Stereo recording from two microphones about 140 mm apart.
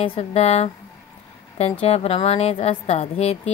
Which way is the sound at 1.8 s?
45° left (ahead or behind).